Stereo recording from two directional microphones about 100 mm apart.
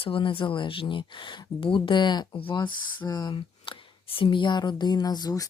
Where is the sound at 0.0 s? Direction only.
60° left (ahead or behind).